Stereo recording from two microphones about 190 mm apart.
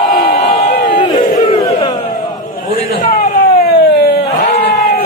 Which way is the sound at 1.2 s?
40° left (ahead or behind).